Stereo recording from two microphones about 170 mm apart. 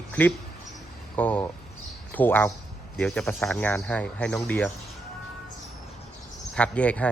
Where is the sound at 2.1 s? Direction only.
10° left (ahead or behind).